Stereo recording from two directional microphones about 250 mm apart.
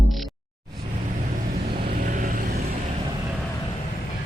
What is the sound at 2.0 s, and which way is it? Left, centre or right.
Vehicle, right.